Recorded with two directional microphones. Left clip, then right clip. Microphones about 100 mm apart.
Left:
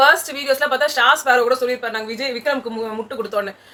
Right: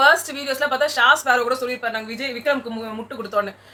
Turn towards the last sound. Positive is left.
turn(degrees=20)  # may be behind; listen again after turning